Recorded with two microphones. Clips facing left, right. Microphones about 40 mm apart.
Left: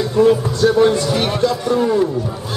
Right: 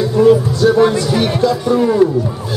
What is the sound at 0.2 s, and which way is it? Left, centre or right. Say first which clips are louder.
Speech: right 3 dB; centre.